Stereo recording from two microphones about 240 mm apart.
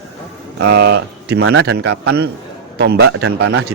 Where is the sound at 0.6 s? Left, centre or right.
Right.